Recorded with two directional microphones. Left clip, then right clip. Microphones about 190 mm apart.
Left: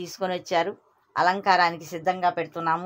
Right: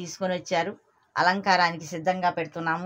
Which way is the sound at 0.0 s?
15° left (ahead or behind).